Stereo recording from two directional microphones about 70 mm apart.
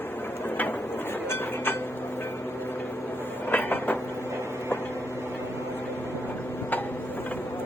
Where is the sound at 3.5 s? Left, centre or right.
Left.